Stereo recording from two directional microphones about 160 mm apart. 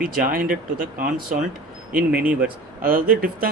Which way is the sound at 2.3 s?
65° right (ahead or behind).